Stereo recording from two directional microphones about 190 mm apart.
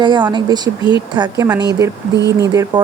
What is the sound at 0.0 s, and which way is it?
Speech, 25° right (ahead or behind).